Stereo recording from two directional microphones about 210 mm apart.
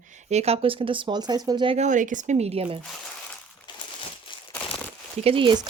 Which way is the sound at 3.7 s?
20° left (ahead or behind).